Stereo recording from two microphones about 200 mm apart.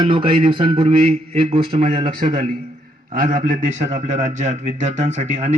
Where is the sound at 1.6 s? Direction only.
45° right (ahead or behind).